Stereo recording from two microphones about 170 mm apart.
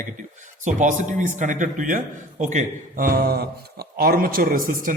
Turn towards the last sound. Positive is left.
turn(degrees=-55)  # may be behind; listen again after turning